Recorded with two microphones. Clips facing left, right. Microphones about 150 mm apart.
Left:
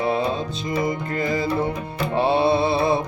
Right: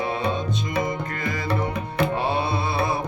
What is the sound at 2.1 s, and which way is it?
Music, 30° left (ahead or behind).